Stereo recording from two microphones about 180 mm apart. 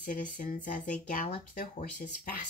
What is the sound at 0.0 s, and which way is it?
Speech, 45° left (ahead or behind).